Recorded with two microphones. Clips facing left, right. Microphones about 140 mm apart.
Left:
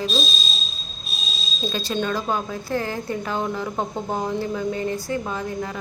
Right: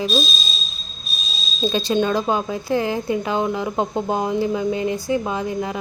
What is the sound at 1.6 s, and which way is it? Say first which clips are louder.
Speech: right 6 dB; 25° right (ahead or behind).